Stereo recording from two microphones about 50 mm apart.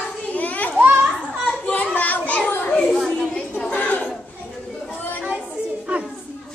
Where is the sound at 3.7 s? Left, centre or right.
Left.